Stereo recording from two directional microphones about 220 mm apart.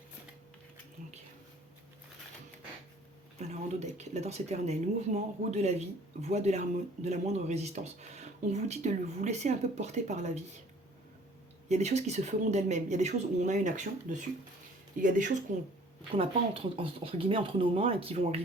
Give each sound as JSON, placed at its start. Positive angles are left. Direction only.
{"t": 3.3, "sound": "speech", "side_deg": -30}
{"t": 11.7, "sound": "speech", "side_deg": -30}
{"t": 16.1, "sound": "speech", "side_deg": -25}